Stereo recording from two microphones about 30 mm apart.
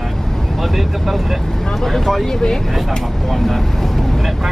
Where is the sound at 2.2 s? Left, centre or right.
Centre.